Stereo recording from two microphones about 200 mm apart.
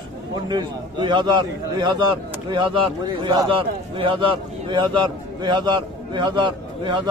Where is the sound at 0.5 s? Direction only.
20° right (ahead or behind).